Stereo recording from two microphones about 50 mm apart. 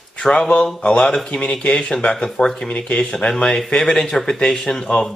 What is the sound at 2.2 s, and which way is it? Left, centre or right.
Speech, centre.